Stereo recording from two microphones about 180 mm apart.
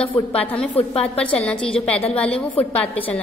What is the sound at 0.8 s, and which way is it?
Speech, 35° left (ahead or behind).